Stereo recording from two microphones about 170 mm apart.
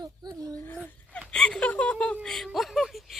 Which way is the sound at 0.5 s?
10° left (ahead or behind).